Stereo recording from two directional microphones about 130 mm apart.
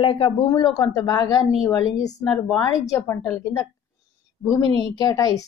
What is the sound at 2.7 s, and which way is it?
Speech, 20° left (ahead or behind).